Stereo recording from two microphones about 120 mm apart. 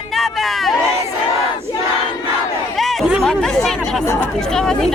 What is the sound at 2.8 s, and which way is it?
Chatter, centre (ahead or behind).